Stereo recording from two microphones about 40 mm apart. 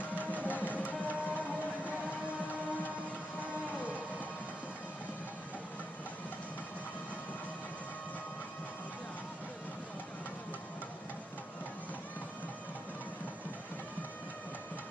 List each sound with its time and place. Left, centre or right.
0.3 s music: left